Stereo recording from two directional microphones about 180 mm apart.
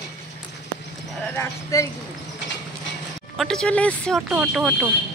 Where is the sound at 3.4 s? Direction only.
5° left (ahead or behind).